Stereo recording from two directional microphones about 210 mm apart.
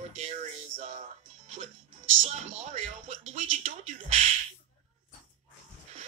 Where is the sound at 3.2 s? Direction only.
35° right (ahead or behind).